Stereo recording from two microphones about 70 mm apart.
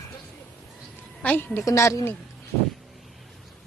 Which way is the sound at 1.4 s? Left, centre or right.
Left.